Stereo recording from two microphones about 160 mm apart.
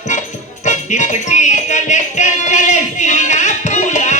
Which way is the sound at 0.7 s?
50° left (ahead or behind).